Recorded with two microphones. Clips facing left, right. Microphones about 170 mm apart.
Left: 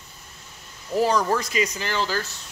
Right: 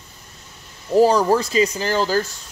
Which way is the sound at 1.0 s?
35° right (ahead or behind).